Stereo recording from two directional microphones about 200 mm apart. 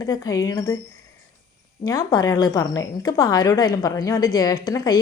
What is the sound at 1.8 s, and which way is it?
A woman's voice, 20° left (ahead or behind).